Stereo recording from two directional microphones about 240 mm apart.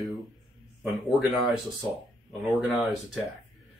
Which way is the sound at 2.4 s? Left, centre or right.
Centre.